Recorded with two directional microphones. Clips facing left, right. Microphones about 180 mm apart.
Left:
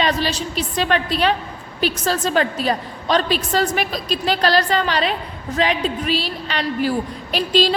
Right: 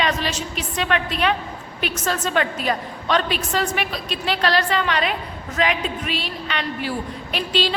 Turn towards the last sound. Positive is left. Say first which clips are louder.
# left 5 dB
turn(degrees=40)  # may be behind; listen again after turning